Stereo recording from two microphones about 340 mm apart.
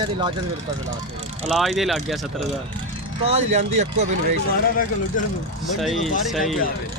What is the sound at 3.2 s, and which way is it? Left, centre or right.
Speech, centre.